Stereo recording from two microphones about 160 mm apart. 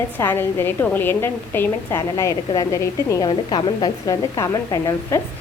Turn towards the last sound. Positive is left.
turn(degrees=20)  # may be behind; listen again after turning